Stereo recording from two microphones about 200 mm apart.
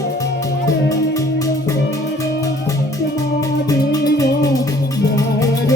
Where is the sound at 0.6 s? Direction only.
15° left (ahead or behind).